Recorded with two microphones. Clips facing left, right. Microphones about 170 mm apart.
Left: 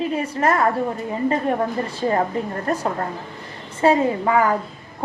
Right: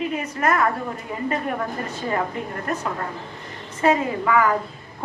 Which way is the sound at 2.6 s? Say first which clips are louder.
Left 2 dB; 35° left (ahead or behind).